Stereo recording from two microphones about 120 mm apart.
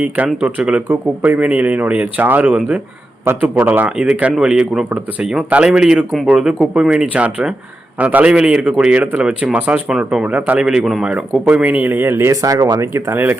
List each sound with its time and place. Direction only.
0.4 s a man's voice: 10° right (ahead or behind); by 12.8 s 35° right (ahead or behind)
12.8 s speech: 20° right (ahead or behind)